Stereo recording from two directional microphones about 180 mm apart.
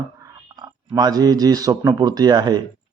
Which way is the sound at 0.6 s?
20° right (ahead or behind).